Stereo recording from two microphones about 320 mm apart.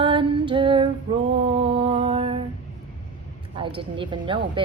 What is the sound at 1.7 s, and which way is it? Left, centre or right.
Mantra, centre.